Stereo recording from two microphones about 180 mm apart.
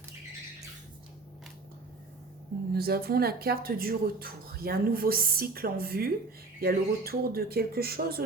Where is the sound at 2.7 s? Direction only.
60° right (ahead or behind).